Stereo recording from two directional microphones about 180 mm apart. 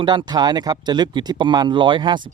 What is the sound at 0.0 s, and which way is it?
Speech, 25° right (ahead or behind).